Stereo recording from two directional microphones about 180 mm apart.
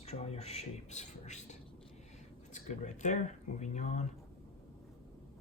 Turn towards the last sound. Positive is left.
turn(degrees=40)  # may be behind; listen again after turning